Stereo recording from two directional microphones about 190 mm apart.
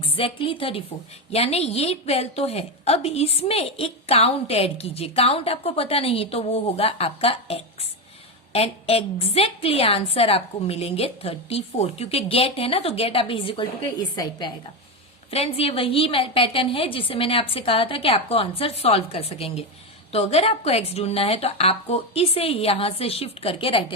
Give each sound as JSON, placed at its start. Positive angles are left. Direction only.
{"t": 0.0, "sound": "a woman's voice", "side_deg": 30}